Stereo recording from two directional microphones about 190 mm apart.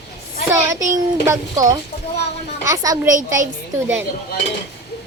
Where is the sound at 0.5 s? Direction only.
15° right (ahead or behind).